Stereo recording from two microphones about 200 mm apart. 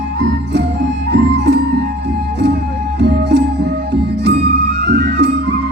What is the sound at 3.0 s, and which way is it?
Music, 60° right (ahead or behind).